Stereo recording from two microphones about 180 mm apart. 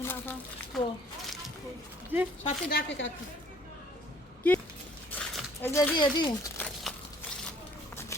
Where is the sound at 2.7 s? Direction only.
90° left.